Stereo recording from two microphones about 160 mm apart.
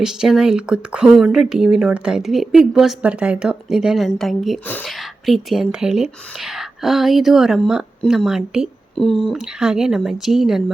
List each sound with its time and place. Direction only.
0.0 s speech: 5° right (ahead or behind)
4.6 s speech: 10° left (ahead or behind)
4.9 s speech: centre (ahead or behind)